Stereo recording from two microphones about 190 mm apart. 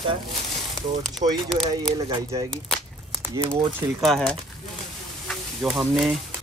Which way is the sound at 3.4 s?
10° right (ahead or behind).